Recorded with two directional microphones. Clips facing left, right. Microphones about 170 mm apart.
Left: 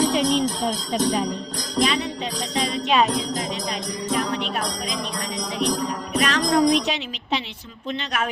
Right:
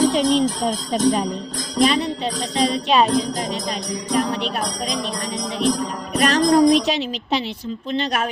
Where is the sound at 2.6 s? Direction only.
35° right (ahead or behind).